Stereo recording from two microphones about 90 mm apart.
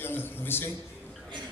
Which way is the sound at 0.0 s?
25° left (ahead or behind).